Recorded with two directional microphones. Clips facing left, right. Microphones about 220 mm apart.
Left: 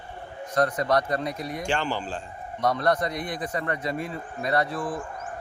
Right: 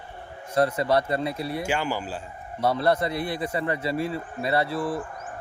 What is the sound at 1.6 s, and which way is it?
A man's voice, 10° right (ahead or behind).